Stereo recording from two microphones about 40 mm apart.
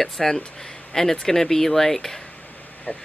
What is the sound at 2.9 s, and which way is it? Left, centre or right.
Speech, left.